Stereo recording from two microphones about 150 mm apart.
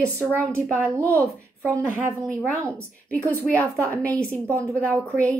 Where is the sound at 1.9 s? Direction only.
15° right (ahead or behind).